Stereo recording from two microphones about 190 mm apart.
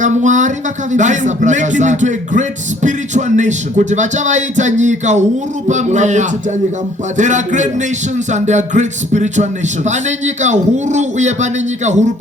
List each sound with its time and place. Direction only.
0.0 s speech: 40° right (ahead or behind)